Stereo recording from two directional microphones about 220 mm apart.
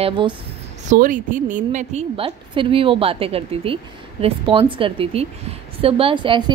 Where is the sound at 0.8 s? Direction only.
35° right (ahead or behind).